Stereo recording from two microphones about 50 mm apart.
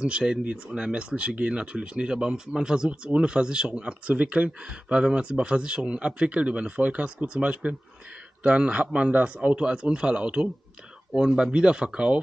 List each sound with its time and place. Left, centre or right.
0.0 s speech: centre
4.5 s speech: centre